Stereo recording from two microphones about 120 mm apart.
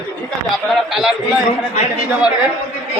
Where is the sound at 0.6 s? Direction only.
Centre (ahead or behind).